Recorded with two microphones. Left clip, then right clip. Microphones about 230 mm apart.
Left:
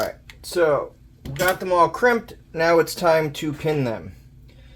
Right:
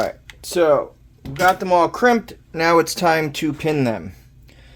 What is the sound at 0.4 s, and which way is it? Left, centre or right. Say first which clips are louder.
Speech: right 4 dB; right.